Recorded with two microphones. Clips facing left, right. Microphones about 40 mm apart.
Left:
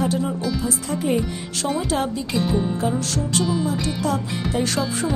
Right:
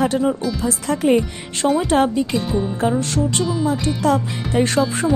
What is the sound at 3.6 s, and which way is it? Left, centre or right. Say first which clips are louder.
Music: right 5 dB; right.